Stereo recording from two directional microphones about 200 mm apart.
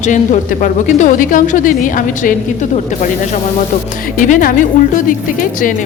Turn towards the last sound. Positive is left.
turn(degrees=40)  # may be behind; listen again after turning